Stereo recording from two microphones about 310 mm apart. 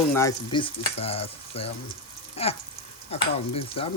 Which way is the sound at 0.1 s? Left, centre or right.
Centre.